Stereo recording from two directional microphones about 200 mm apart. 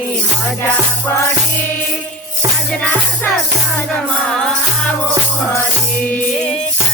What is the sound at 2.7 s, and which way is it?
Music, 5° left (ahead or behind).